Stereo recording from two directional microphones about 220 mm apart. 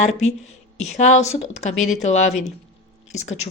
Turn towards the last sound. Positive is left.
turn(degrees=30)  # may be behind; listen again after turning